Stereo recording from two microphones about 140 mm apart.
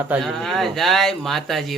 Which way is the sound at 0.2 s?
Centre (ahead or behind).